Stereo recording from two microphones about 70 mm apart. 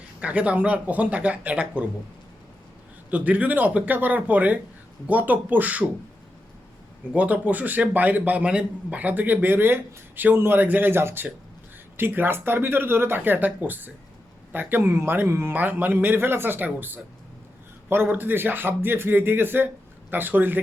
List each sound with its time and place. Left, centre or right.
0.2 s a man's voice: centre
3.1 s a man's voice: right
7.1 s a man's voice: centre